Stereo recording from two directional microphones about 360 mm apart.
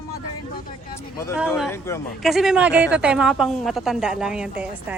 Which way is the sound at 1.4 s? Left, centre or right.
Centre.